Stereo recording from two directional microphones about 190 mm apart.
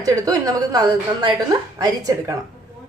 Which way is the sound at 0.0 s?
20° right (ahead or behind).